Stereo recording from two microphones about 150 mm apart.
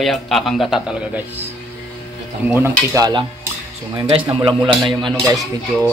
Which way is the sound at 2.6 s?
25° right (ahead or behind).